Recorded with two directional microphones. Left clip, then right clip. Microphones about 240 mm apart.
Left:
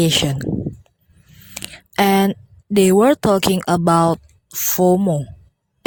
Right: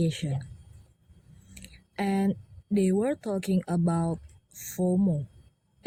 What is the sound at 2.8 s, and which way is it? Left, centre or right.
Speech, left.